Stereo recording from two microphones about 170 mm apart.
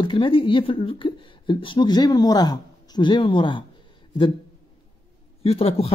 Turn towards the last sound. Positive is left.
turn(degrees=35)  # may be behind; listen again after turning